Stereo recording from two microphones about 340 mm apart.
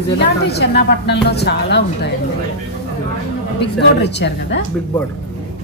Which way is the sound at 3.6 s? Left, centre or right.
Left.